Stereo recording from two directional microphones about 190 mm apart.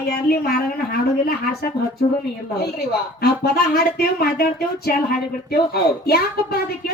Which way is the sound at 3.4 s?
55° left (ahead or behind).